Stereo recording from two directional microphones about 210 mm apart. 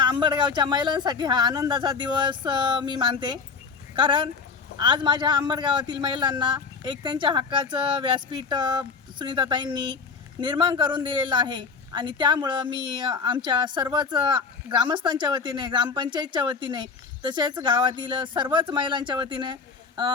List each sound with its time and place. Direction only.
0.0 s speech: 20° right (ahead or behind)